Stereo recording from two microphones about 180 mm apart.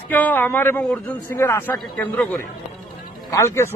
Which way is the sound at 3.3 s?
15° left (ahead or behind).